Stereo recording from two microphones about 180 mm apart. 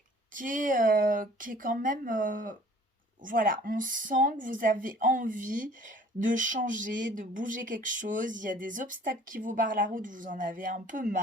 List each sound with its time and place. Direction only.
0.3 s speech: 50° right (ahead or behind)